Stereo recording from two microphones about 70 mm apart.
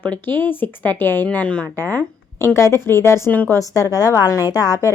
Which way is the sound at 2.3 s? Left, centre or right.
Left.